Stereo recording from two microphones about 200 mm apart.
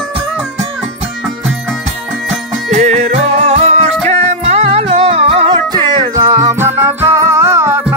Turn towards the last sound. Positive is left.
turn(degrees=-10)  # may be behind; listen again after turning